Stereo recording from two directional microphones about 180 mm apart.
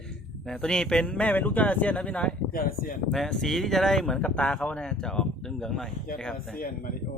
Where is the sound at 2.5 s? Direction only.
55° left (ahead or behind).